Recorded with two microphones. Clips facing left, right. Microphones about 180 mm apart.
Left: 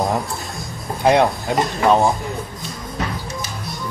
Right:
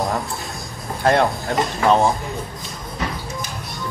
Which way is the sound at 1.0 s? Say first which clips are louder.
Left 2 dB; 20° left (ahead or behind).